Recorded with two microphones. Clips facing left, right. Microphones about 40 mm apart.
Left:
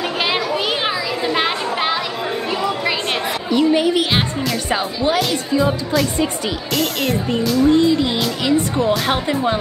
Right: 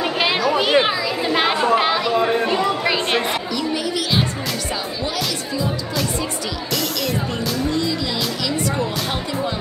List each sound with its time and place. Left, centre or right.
0.2 s a sound: centre
0.6 s children playing: centre
2.2 s chatter: centre
3.5 s music: left
5.0 s music: left
6.7 s speech: centre
7.7 s music: left